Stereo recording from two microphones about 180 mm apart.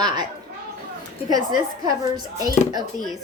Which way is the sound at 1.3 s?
20° right (ahead or behind).